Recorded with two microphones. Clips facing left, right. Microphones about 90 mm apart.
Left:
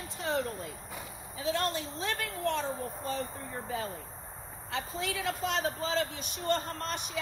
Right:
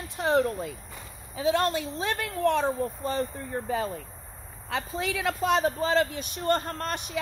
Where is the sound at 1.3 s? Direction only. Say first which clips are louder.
Right 7 dB; 85° right.